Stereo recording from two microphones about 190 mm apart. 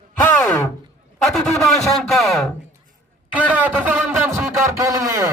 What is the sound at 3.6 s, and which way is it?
Speech, 10° right (ahead or behind).